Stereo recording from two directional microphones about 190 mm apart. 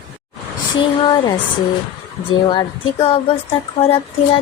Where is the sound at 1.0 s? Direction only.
20° left (ahead or behind).